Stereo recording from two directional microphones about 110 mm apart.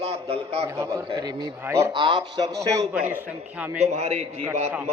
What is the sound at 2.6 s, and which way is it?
Speech, 30° right (ahead or behind).